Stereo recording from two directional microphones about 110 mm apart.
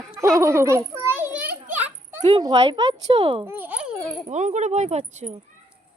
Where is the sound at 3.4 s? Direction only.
20° right (ahead or behind).